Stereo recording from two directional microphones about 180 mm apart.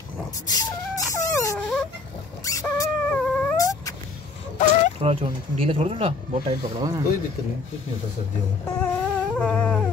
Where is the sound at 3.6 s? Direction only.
20° left (ahead or behind).